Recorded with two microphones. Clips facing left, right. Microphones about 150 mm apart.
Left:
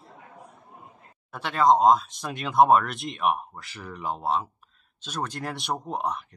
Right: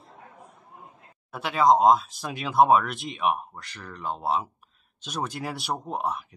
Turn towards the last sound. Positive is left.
turn(degrees=-5)  # may be behind; listen again after turning